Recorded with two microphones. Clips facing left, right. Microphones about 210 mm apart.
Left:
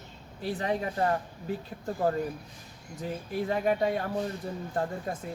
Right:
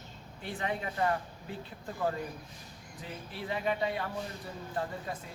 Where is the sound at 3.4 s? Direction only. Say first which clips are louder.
Left 6 dB; 45° left (ahead or behind).